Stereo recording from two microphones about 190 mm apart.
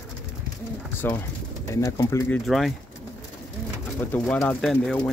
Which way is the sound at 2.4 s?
Centre (ahead or behind).